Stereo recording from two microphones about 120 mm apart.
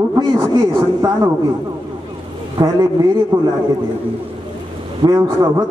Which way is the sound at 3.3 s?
40° right (ahead or behind).